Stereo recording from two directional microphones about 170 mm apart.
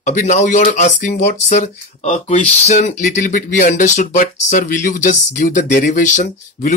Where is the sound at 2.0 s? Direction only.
45° left (ahead or behind).